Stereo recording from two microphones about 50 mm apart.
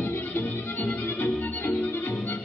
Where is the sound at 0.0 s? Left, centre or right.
Left.